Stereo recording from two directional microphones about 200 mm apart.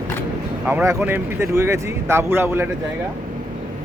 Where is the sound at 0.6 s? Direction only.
10° right (ahead or behind).